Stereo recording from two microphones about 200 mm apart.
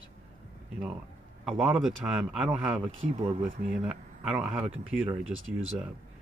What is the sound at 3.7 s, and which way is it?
Speech, 5° right (ahead or behind).